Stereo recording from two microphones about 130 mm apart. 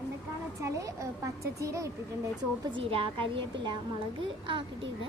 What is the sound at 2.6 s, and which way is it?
A woman's voice, 40° right (ahead or behind).